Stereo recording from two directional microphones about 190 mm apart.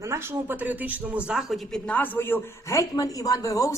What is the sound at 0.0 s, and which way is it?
A woman's voice, 15° right (ahead or behind).